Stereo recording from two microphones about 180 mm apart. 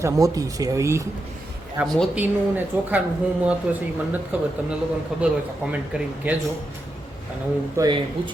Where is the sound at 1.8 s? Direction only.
Centre (ahead or behind).